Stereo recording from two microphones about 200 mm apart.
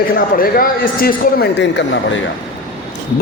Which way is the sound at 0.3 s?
45° left (ahead or behind).